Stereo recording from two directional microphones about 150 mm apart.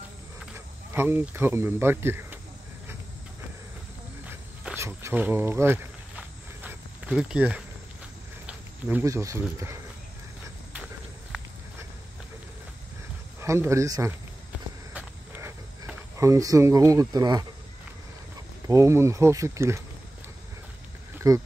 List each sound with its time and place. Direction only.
0.9 s speech: 15° right (ahead or behind)
4.3 s a sound: 15° right (ahead or behind)
9.0 s speech: 20° right (ahead or behind)
13.4 s speech: 20° right (ahead or behind)
15.0 s a sound: 10° right (ahead or behind); by 17.5 s 25° right (ahead or behind)
18.7 s speech: 20° right (ahead or behind)
21.2 s speech: 25° right (ahead or behind)